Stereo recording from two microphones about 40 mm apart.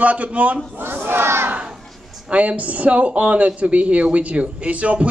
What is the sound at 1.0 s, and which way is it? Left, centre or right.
Battle cry, right.